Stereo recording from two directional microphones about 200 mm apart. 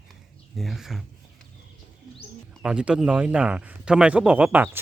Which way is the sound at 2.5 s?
5° right (ahead or behind).